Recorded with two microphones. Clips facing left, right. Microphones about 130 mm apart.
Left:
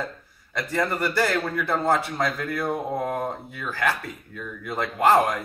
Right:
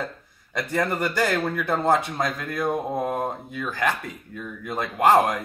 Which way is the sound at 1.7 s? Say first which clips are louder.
Right 1 dB; 20° right (ahead or behind).